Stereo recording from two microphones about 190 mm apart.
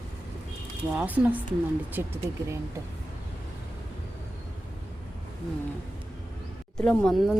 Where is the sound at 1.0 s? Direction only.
10° right (ahead or behind).